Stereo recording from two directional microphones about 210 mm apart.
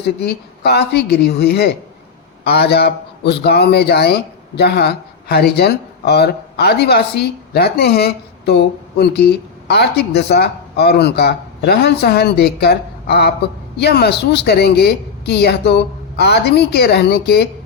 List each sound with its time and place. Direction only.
0.2 s a man's voice: 50° left (ahead or behind)